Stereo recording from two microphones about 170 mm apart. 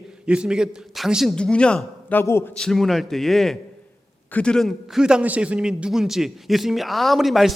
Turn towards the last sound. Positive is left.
turn(degrees=0)  # may be behind; listen again after turning